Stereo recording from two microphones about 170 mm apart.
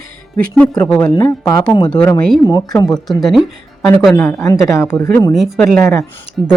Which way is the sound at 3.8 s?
20° left (ahead or behind).